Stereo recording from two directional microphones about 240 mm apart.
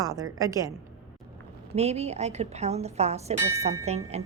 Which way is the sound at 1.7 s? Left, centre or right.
Right.